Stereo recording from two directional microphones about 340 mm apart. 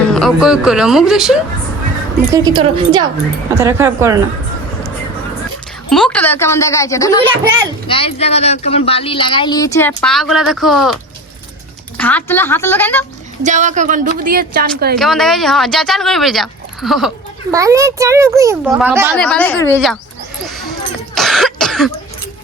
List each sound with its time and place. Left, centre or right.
0.1 s speech: centre
2.3 s a child's voice: centre
5.9 s speech: centre
11.9 s speech: centre
13.4 s a woman's voice: right
14.9 s a child's voice: centre
21.2 s cough: centre